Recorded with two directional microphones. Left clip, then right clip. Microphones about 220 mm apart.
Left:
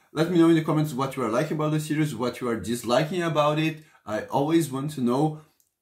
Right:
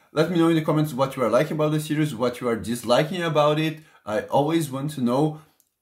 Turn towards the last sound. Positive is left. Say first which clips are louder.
# right 2 dB
turn(degrees=-20)  # may be behind; listen again after turning